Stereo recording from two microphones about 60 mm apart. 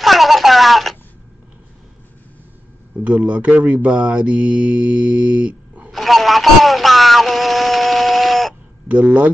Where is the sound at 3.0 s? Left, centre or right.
Right.